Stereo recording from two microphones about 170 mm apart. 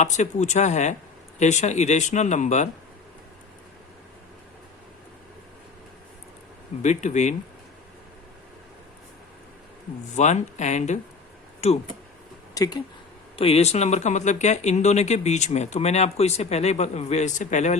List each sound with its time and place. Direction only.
0.0 s speech: 45° left (ahead or behind)
6.8 s speech: 45° left (ahead or behind)
10.2 s speech: 45° left (ahead or behind)
12.5 s speech: 20° left (ahead or behind)
13.3 s speech: 35° left (ahead or behind)